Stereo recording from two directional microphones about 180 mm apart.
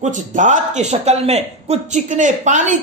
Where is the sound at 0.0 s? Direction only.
40° right (ahead or behind).